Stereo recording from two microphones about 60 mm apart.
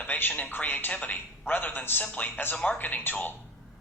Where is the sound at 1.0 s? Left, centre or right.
Centre.